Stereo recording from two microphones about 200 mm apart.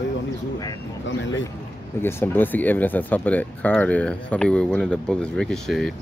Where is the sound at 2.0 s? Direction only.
10° left (ahead or behind).